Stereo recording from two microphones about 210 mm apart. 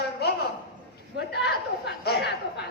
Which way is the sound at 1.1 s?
55° left (ahead or behind).